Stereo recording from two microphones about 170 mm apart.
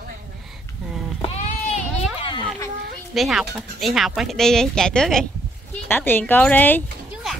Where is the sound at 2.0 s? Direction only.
30° left (ahead or behind).